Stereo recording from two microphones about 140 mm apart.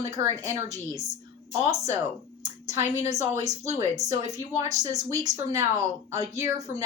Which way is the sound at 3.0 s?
25° right (ahead or behind).